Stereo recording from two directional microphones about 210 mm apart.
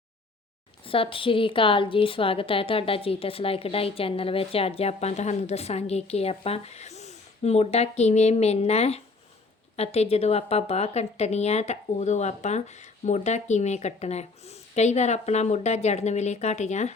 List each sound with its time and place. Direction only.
0.9 s a woman's voice: 25° left (ahead or behind)